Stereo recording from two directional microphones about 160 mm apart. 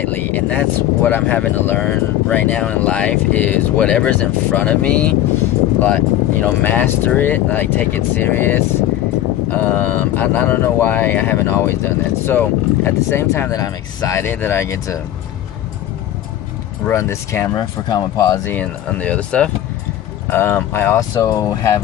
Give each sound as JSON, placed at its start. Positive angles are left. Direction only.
{"t": 0.1, "sound": "speech", "side_deg": 10}
{"t": 16.8, "sound": "speech", "side_deg": 15}
{"t": 18.5, "sound": "speech", "side_deg": 10}